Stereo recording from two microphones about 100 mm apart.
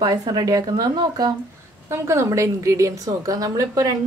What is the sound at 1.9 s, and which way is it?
Speech, 25° right (ahead or behind).